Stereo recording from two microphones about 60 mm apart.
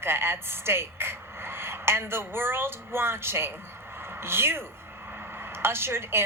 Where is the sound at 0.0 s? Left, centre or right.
Right.